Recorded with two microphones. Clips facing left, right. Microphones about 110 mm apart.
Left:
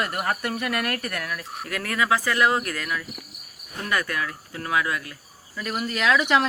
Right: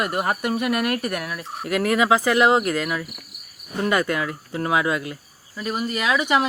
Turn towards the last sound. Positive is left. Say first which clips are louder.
# even
turn(degrees=-10)  # may be behind; listen again after turning